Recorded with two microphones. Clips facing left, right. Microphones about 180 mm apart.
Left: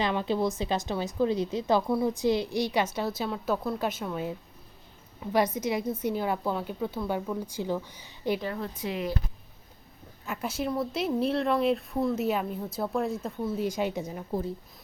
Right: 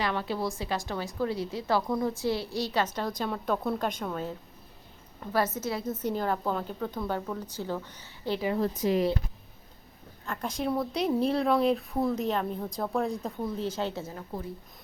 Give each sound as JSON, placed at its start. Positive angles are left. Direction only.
{"t": 0.0, "sound": "a woman's voice", "side_deg": 20}
{"t": 1.9, "sound": "a woman's voice", "side_deg": 5}
{"t": 2.1, "sound": "a woman's voice", "side_deg": 20}
{"t": 8.5, "sound": "speech", "side_deg": -40}
{"t": 10.2, "sound": "a woman's voice", "side_deg": 5}